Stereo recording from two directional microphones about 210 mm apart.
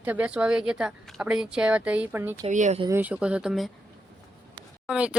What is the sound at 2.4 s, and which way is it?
Speech, 35° right (ahead or behind).